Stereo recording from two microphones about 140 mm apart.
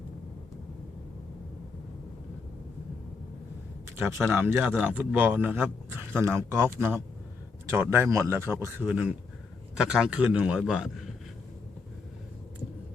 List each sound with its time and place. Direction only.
3.9 s a man's voice: 15° right (ahead or behind)